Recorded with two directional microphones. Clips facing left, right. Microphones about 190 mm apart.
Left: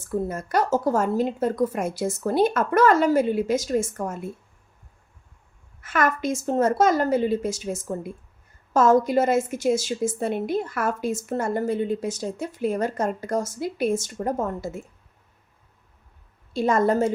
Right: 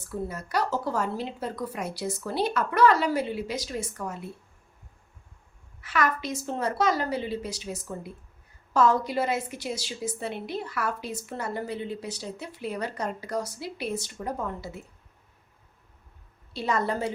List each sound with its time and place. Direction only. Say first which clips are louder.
0.0 s a woman's voice: left 6 dB; 50° left (ahead or behind)
5.8 s a woman's voice: left 4 dB; 50° left (ahead or behind)
16.5 s a woman's voice: left 7 dB; 45° left (ahead or behind)